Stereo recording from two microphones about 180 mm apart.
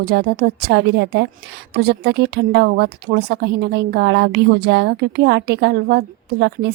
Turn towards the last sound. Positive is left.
turn(degrees=-70)  # may be behind; listen again after turning